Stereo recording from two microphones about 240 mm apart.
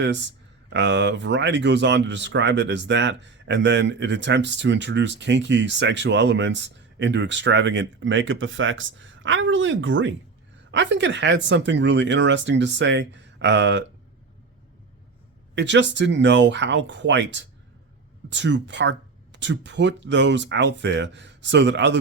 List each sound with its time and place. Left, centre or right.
0.0 s speech: right
15.5 s speech: right